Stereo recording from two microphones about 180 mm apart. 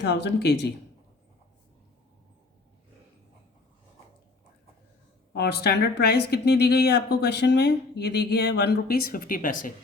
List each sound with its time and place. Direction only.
0.0 s speech: 70° left (ahead or behind)
5.3 s speech: 65° left (ahead or behind)